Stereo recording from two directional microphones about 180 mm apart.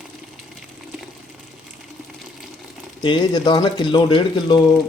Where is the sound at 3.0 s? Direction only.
25° left (ahead or behind).